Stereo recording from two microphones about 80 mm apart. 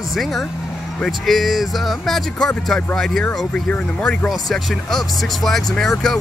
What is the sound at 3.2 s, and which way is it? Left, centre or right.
Speech, centre.